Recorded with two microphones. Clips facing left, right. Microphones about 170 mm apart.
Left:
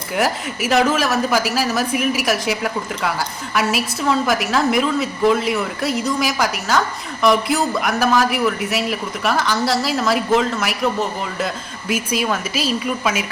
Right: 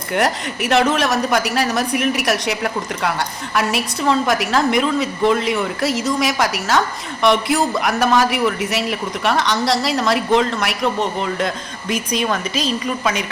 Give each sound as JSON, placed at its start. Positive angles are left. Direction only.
{"t": 0.1, "sound": "a woman's voice", "side_deg": 0}